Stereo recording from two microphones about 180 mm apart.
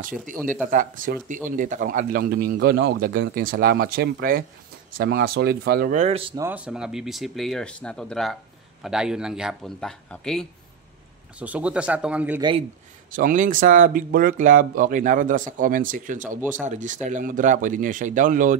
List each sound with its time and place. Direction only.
0.0 s speech: 50° right (ahead or behind)
5.9 s speech: 35° right (ahead or behind)
6.3 s speech: 10° right (ahead or behind)
11.3 s speech: 5° right (ahead or behind)
12.4 s speech: 25° right (ahead or behind)
13.1 s speech: 50° right (ahead or behind)